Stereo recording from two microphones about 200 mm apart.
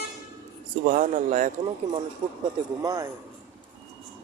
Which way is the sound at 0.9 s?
40° right (ahead or behind).